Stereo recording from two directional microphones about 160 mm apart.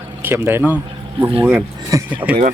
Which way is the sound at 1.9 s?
20° right (ahead or behind).